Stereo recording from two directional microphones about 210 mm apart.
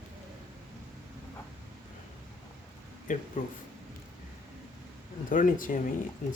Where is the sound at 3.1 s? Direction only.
40° left (ahead or behind).